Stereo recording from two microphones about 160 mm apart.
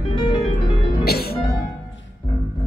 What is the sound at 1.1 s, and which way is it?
Music, 75° left (ahead or behind).